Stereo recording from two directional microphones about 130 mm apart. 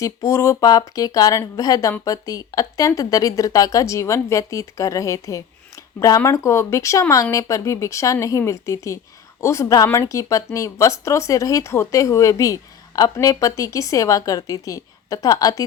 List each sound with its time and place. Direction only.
0.0 s speech: 25° left (ahead or behind)